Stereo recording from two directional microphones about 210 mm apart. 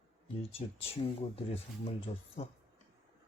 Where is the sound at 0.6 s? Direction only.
35° left (ahead or behind).